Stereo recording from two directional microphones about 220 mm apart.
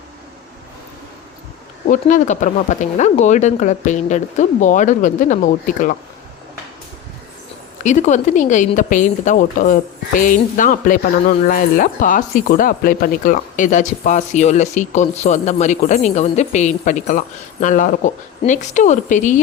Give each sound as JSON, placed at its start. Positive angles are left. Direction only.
{"t": 1.9, "sound": "speech", "side_deg": 35}
{"t": 7.9, "sound": "speech", "side_deg": 35}